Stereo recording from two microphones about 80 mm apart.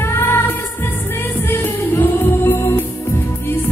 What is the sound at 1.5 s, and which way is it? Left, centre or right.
Music, left.